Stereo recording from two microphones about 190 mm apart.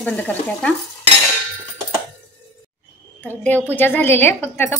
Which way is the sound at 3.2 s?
10° left (ahead or behind).